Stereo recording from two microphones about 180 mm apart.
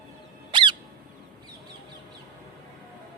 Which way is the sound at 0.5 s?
25° right (ahead or behind).